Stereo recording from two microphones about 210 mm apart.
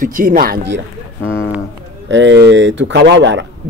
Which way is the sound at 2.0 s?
60° right (ahead or behind).